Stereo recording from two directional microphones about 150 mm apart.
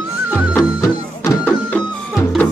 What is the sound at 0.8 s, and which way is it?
Music, 20° left (ahead or behind).